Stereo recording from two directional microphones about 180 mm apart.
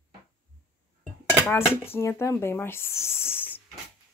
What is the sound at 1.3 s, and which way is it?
Speech, 10° left (ahead or behind).